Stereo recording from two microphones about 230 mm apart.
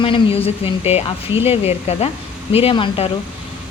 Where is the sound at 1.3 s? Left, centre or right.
Centre.